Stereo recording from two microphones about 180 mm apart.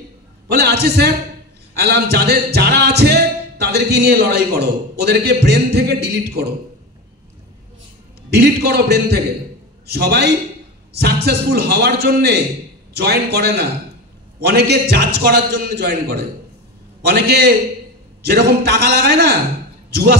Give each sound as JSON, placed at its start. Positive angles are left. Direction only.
{"t": 0.5, "sound": "music", "side_deg": -65}
{"t": 8.4, "sound": "music", "side_deg": -60}